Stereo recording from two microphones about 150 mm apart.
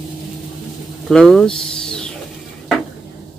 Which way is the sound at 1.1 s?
5° left (ahead or behind).